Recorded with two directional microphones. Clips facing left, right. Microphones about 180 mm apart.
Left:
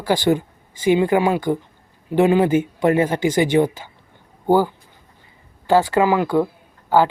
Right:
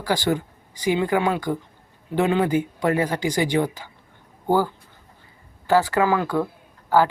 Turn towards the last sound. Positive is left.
turn(degrees=25)  # may be behind; listen again after turning